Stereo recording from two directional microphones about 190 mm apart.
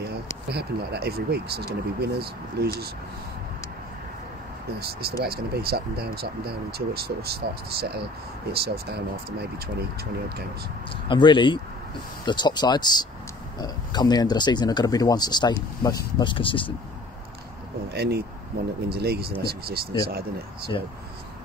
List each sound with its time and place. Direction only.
0.5 s speech: 55° right (ahead or behind)
4.7 s speech: 55° right (ahead or behind)
11.1 s speech: 25° left (ahead or behind)
17.9 s speech: 60° right (ahead or behind)